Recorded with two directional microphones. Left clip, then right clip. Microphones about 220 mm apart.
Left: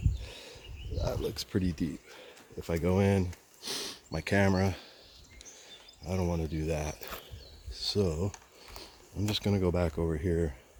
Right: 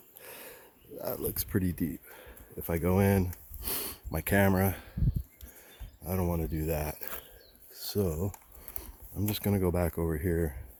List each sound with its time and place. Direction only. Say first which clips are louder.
0.2 s a sound: left 1 dB; 35° right (ahead or behind)
0.9 s bird: left 1 dB; 25° right (ahead or behind)
1.3 s speech: even; 30° right (ahead or behind)
6.1 s speech: even; 30° right (ahead or behind)
7.7 s a sound: left 2 dB; 25° right (ahead or behind)
8.8 s speech: even; 30° right (ahead or behind)